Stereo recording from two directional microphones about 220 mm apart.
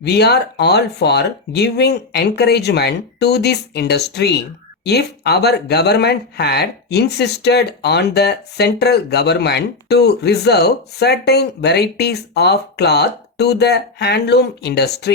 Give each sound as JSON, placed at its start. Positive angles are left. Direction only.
{"t": 0.0, "sound": "speech", "side_deg": 50}